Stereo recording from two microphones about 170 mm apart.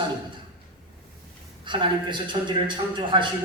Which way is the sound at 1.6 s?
30° right (ahead or behind).